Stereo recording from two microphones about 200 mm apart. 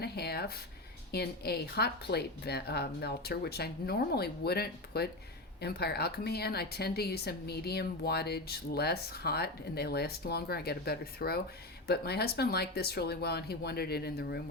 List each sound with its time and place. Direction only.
0.0 s speech: 50° left (ahead or behind)